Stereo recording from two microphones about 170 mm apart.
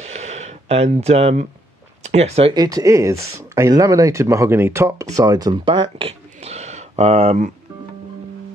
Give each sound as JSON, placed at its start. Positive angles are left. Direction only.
{"t": 0.0, "sound": "a sound", "side_deg": -40}
{"t": 2.0, "sound": "speech", "side_deg": -40}
{"t": 2.5, "sound": "speech", "side_deg": -20}